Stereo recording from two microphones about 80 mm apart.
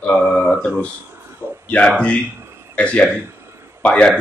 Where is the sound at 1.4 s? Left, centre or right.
Right.